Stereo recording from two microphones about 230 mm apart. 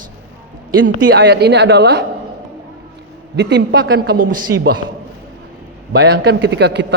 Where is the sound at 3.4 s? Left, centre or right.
Right.